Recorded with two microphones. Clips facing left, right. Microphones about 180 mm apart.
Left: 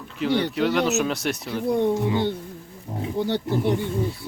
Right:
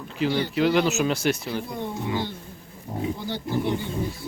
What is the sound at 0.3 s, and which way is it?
Speech, 70° left (ahead or behind).